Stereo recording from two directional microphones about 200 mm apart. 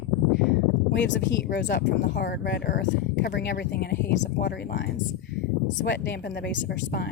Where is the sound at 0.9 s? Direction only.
65° left (ahead or behind).